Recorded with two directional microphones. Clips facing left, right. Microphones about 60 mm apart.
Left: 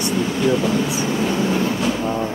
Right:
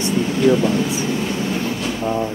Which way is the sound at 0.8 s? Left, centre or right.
Left.